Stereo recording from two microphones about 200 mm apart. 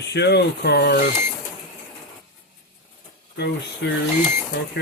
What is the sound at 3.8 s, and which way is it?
Speech, 55° left (ahead or behind).